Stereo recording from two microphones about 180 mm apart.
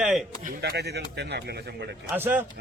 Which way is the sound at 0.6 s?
65° right (ahead or behind).